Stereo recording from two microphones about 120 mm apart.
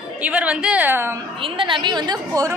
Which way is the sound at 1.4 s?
45° right (ahead or behind).